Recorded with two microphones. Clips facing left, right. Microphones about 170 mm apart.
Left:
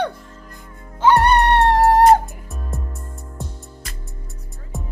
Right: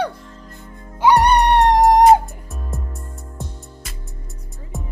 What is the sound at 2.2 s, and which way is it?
Music, centre (ahead or behind).